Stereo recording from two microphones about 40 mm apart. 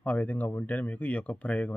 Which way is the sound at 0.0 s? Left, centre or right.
Left.